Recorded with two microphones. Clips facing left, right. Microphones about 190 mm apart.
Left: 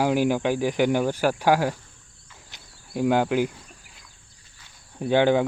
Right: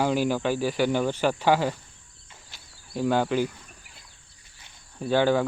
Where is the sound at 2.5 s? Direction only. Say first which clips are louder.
Left 2 dB; 15° left (ahead or behind).